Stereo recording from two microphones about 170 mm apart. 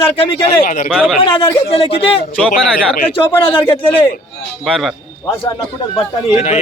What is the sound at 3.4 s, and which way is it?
Speech, 30° left (ahead or behind).